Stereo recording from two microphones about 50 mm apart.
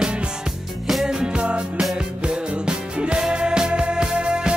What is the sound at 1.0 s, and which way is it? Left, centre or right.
Music, centre.